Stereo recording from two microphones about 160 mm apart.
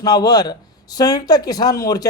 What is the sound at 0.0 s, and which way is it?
Speech, 25° left (ahead or behind).